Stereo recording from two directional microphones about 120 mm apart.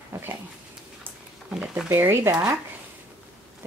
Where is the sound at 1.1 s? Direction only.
10° right (ahead or behind).